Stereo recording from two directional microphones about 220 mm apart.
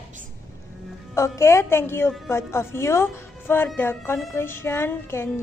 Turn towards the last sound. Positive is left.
turn(degrees=10)  # may be behind; listen again after turning